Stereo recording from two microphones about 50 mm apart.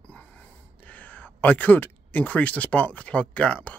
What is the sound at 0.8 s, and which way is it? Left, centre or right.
Speech, left.